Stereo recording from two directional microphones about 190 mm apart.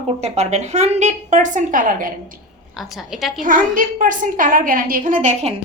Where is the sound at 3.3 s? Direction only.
45° right (ahead or behind).